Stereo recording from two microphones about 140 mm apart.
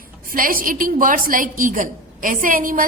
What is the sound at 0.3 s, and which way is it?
A woman's voice, 90° right.